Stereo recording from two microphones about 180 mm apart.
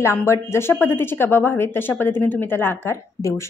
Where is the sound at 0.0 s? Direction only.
15° left (ahead or behind).